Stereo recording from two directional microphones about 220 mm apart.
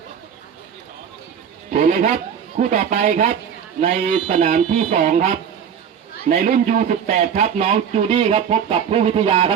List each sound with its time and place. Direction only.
1.7 s speech: 35° right (ahead or behind)